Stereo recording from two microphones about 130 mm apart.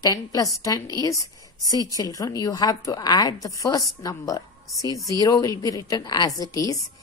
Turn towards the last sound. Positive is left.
turn(degrees=30)  # may be behind; listen again after turning